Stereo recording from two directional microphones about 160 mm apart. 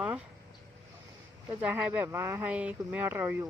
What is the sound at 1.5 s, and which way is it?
Speech, 10° right (ahead or behind).